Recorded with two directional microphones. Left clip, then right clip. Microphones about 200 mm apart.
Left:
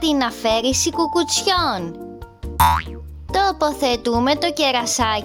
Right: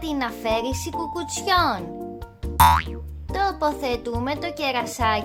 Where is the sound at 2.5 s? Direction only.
Centre (ahead or behind).